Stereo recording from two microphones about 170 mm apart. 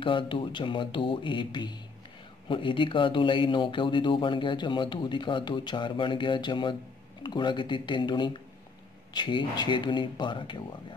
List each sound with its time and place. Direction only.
0.0 s speech: 30° left (ahead or behind)